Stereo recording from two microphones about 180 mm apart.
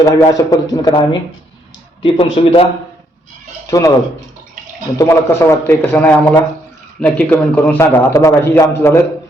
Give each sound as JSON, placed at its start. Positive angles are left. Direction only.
{"t": 0.0, "sound": "a man's voice", "side_deg": 20}
{"t": 2.0, "sound": "speech", "side_deg": 30}
{"t": 3.7, "sound": "speech", "side_deg": 20}
{"t": 4.9, "sound": "a man's voice", "side_deg": 15}